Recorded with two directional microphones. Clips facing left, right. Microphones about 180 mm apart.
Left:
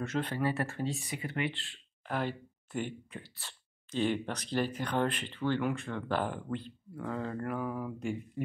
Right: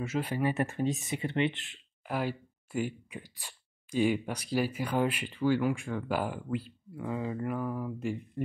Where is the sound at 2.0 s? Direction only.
5° right (ahead or behind).